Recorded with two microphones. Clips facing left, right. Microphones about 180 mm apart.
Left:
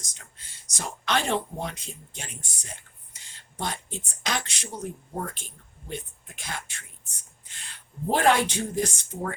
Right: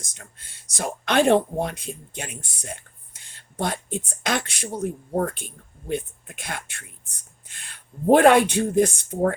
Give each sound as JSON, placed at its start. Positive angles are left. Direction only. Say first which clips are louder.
{"t": 0.0, "sound": "speech", "louder": "right 5 dB", "side_deg": -55}